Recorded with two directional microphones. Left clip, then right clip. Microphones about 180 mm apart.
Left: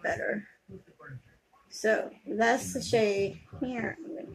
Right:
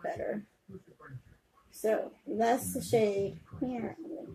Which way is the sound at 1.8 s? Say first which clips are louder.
Left 3 dB; 15° right (ahead or behind).